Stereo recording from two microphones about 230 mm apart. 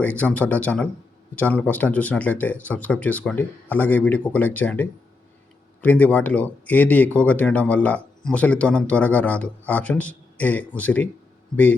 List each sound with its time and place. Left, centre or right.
0.0 s speech: centre